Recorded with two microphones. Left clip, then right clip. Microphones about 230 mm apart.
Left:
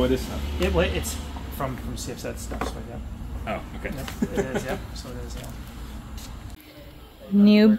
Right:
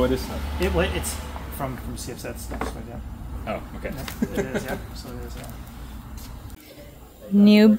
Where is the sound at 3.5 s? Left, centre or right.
Right.